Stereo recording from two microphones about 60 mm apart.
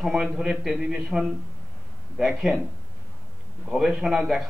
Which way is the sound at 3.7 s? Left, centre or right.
Centre.